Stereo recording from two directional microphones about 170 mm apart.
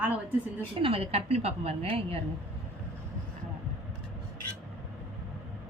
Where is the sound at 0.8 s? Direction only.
35° right (ahead or behind).